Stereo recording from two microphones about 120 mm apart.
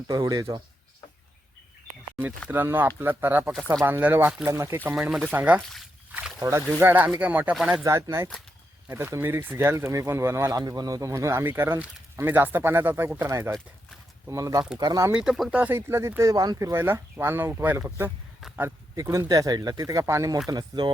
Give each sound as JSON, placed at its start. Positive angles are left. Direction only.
{"t": 0.1, "sound": "speech", "side_deg": -30}
{"t": 2.5, "sound": "speech", "side_deg": -15}
{"t": 6.1, "sound": "a sound", "side_deg": -10}
{"t": 6.4, "sound": "speech", "side_deg": -25}
{"t": 7.9, "sound": "speech", "side_deg": -25}
{"t": 15.1, "sound": "speech", "side_deg": -5}
{"t": 20.5, "sound": "speech", "side_deg": -35}